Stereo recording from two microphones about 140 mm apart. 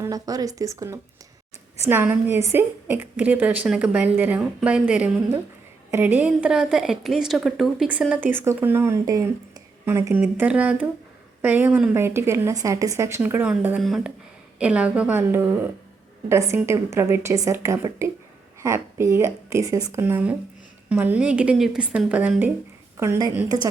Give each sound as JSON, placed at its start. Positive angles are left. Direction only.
{"t": 0.0, "sound": "a woman's voice", "side_deg": -25}
{"t": 8.1, "sound": "a woman's voice", "side_deg": -15}
{"t": 13.8, "sound": "a woman's voice", "side_deg": 0}
{"t": 23.0, "sound": "speech", "side_deg": -20}